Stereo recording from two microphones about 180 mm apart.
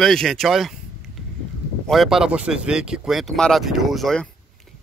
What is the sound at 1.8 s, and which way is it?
Speech, centre (ahead or behind).